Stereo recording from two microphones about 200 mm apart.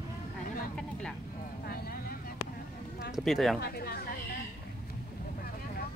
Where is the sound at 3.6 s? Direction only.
50° left (ahead or behind).